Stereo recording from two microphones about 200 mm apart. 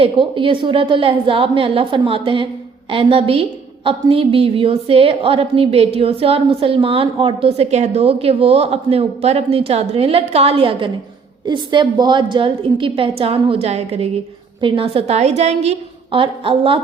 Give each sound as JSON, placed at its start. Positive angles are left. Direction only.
{"t": 0.0, "sound": "a woman's voice", "side_deg": -25}